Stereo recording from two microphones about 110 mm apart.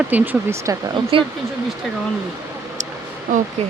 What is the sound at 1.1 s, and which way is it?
Speech, 55° right (ahead or behind).